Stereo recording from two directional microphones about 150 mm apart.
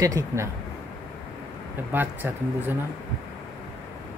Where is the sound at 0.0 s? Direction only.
20° right (ahead or behind).